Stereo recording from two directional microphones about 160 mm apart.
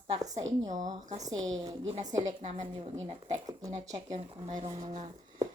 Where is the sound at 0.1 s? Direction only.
25° right (ahead or behind).